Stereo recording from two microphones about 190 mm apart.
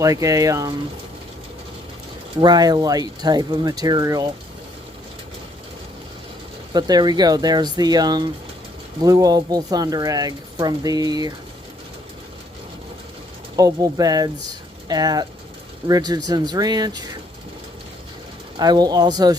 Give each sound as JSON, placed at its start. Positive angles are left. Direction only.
{"t": 0.0, "sound": "speech", "side_deg": -15}
{"t": 2.4, "sound": "speech", "side_deg": -20}
{"t": 6.7, "sound": "speech", "side_deg": -20}
{"t": 13.6, "sound": "speech", "side_deg": -20}
{"t": 18.6, "sound": "speech", "side_deg": -20}